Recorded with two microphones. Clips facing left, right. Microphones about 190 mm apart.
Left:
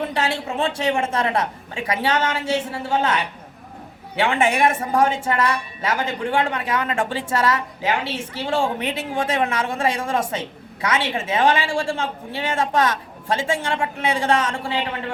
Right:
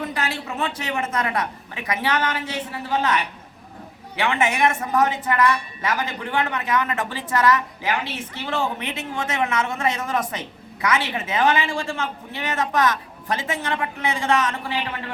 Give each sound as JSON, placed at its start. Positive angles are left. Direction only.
{"t": 0.0, "sound": "a woman's voice", "side_deg": 25}